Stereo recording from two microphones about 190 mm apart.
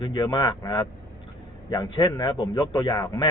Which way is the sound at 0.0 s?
20° left (ahead or behind).